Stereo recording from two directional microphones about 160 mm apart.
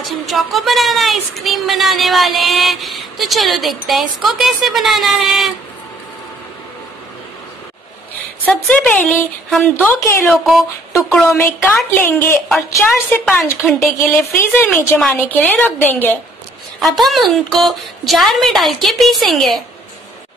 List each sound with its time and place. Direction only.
0.0 s speech: centre (ahead or behind)
8.5 s a woman's voice: 5° left (ahead or behind)
10.9 s a woman's voice: 15° left (ahead or behind)
12.4 s speech: centre (ahead or behind)
13.9 s a woman's voice: 15° left (ahead or behind)
16.8 s speech: centre (ahead or behind)